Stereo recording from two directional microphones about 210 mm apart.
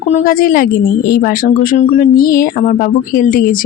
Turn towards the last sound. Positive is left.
turn(degrees=40)  # may be behind; listen again after turning